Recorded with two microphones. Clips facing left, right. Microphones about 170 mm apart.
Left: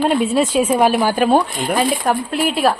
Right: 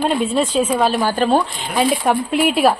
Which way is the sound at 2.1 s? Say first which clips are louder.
Right 2 dB; centre (ahead or behind).